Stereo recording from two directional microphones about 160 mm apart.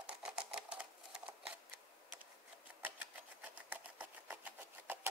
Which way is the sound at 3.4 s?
10° right (ahead or behind).